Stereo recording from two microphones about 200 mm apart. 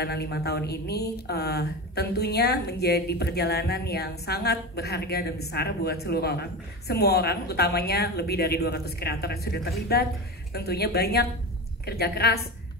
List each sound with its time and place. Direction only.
0.0 s a woman's voice: 55° left (ahead or behind)